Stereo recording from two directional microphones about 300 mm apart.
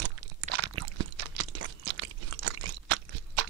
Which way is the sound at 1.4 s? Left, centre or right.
Right.